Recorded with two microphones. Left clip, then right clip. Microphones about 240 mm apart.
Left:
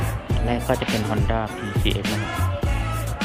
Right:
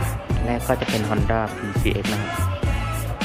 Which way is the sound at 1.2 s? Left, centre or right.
Centre.